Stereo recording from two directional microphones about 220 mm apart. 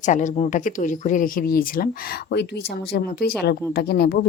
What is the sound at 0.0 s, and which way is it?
Speech, 35° left (ahead or behind).